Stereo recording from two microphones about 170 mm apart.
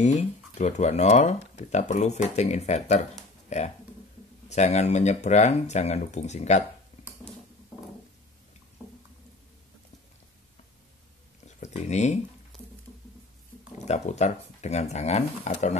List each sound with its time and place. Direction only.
0.0 s speech: 45° left (ahead or behind)
11.4 s a sound: 40° left (ahead or behind)
13.8 s speech: 40° left (ahead or behind)